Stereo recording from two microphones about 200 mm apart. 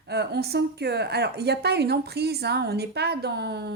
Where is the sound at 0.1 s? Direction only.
55° right (ahead or behind).